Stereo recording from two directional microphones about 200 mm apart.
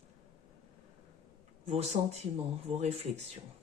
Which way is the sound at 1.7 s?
30° right (ahead or behind).